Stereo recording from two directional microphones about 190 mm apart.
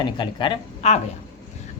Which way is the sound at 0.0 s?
25° left (ahead or behind).